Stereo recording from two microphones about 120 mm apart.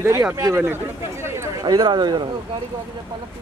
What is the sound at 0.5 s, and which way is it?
Speech, 15° right (ahead or behind).